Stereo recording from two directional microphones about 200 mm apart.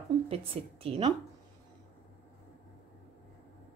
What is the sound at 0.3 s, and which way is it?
Speech, 30° right (ahead or behind).